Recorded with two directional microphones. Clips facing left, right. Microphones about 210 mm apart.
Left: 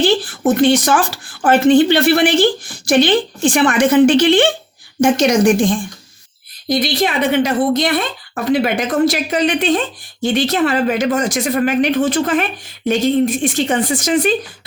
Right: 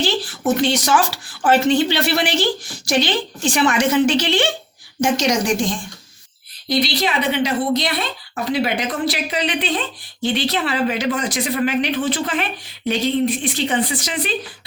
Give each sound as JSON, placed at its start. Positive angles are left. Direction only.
{"t": 0.0, "sound": "speech", "side_deg": 50}